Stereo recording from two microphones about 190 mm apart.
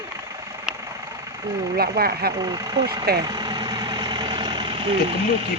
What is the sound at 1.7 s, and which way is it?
Speech, 55° right (ahead or behind).